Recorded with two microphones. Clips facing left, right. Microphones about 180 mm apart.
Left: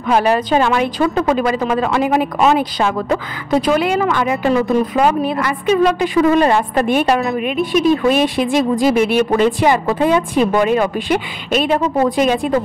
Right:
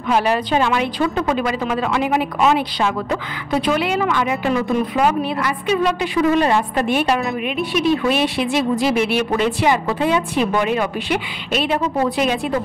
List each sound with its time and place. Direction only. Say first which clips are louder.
0.1 s a woman's voice: left 3 dB; 45° left (ahead or behind)